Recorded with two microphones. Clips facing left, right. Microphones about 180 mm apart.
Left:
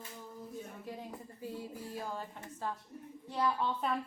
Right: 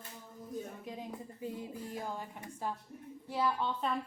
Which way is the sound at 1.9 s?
10° right (ahead or behind).